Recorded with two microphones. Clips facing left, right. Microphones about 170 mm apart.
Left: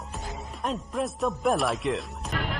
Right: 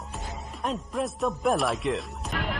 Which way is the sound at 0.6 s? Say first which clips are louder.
Even; centre (ahead or behind).